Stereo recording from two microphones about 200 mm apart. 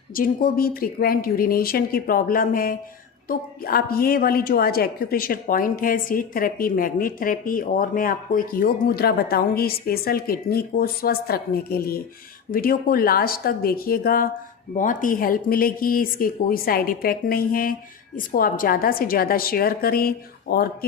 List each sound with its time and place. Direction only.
0.1 s a woman's voice: 45° left (ahead or behind)